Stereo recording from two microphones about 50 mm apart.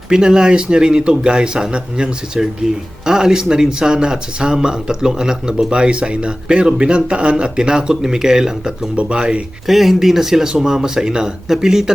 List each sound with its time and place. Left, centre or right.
0.1 s speech: centre
9.6 s speech: centre